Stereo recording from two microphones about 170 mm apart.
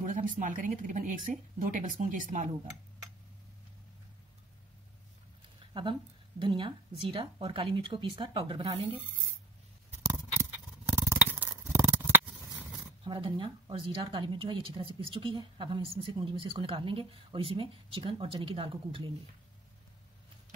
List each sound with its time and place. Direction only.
0.0 s speech: 50° right (ahead or behind)
5.7 s speech: 30° right (ahead or behind)
10.9 s scissors: 15° right (ahead or behind)
12.5 s zipper: 10° right (ahead or behind)
13.0 s speech: 30° right (ahead or behind)